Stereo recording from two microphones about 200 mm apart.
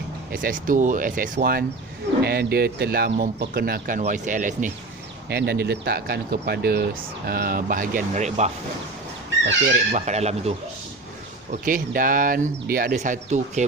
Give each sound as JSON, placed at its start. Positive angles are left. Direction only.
{"t": 0.3, "sound": "speech", "side_deg": -45}
{"t": 5.3, "sound": "speech", "side_deg": -55}
{"t": 9.9, "sound": "speech", "side_deg": -35}
{"t": 11.6, "sound": "speech", "side_deg": -45}